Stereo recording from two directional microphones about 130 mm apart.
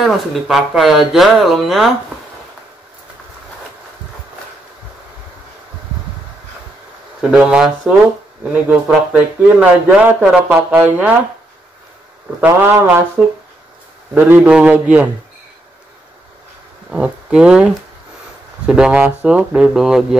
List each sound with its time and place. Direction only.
0.0 s speech: centre (ahead or behind)
7.2 s speech: 5° right (ahead or behind)
12.4 s speech: 15° right (ahead or behind)
14.1 s speech: 15° right (ahead or behind)
16.9 s speech: 10° right (ahead or behind)